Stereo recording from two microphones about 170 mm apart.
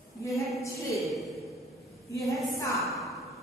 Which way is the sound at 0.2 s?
20° left (ahead or behind).